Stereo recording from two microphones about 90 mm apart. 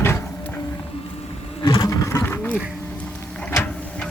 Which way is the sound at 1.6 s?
45° left (ahead or behind).